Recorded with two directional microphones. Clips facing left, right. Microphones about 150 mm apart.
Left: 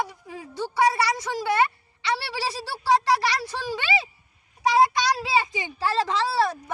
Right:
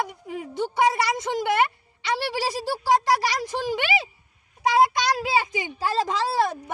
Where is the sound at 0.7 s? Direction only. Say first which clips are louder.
Even; 20° right (ahead or behind).